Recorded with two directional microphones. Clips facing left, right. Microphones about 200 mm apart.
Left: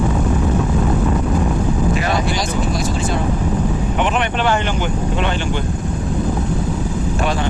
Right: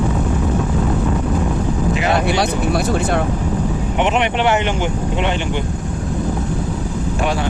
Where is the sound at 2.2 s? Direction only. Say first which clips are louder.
Right 3 dB; 65° right (ahead or behind).